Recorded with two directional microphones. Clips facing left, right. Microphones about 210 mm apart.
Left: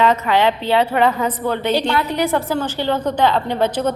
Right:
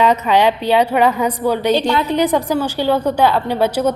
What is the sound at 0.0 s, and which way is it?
A woman's voice, 15° right (ahead or behind).